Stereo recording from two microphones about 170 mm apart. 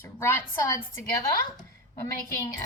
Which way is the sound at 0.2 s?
15° left (ahead or behind).